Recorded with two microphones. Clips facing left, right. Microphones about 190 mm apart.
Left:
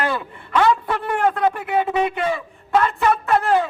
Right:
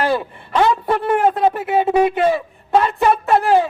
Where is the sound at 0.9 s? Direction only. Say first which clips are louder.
Right 4 dB; 50° right (ahead or behind).